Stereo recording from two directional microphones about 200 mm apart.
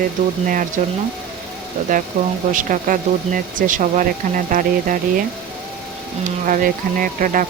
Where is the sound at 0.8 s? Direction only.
40° right (ahead or behind).